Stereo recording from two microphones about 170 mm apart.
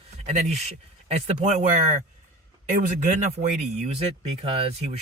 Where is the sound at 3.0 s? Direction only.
45° right (ahead or behind).